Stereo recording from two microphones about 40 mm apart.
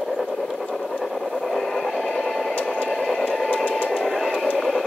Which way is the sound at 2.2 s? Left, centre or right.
Centre.